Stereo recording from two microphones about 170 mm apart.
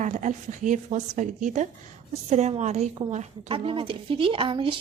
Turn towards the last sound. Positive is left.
turn(degrees=-30)  # may be behind; listen again after turning